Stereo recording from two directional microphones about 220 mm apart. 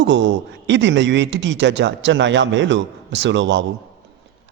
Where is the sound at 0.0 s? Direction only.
55° right (ahead or behind).